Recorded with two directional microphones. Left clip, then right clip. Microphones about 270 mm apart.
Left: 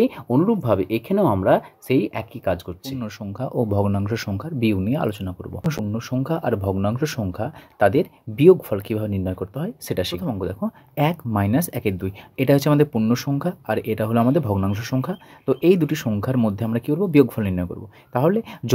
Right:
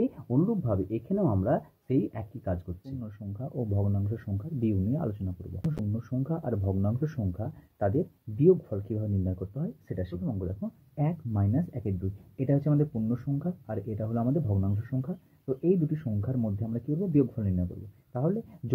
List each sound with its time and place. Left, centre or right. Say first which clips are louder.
0.0 s speech: left 10 dB; left
3.5 s speech: left 12 dB; left